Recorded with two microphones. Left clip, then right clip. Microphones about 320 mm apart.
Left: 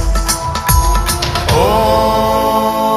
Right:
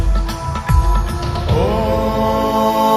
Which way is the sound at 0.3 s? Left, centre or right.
Left.